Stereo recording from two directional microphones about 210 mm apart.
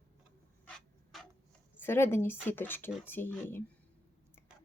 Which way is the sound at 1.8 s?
10° left (ahead or behind).